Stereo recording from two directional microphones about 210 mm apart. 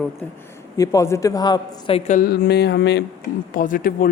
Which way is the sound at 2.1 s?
45° left (ahead or behind).